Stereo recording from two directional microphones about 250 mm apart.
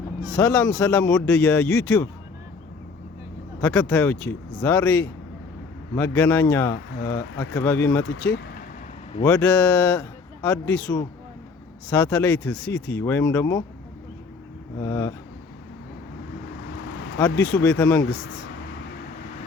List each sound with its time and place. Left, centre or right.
0.3 s speech: centre
3.6 s speech: centre
8.0 s speech: left
9.2 s speech: centre
14.8 s speech: centre
17.2 s speech: centre